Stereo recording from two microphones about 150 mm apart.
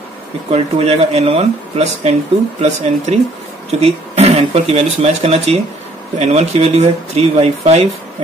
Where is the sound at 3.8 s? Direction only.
45° right (ahead or behind).